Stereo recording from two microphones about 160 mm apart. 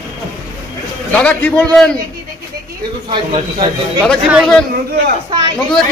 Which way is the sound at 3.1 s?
30° right (ahead or behind).